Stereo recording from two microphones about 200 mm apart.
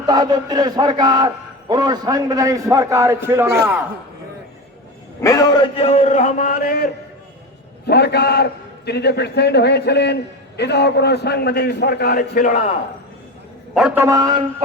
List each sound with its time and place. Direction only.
0.0 s a man's voice: 20° right (ahead or behind)
5.2 s a man's voice: 15° left (ahead or behind); by 12.6 s 45° left (ahead or behind)
13.7 s a man's voice: 5° right (ahead or behind)